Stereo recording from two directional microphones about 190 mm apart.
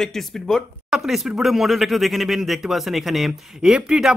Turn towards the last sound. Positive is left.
turn(degrees=-5)  # may be behind; listen again after turning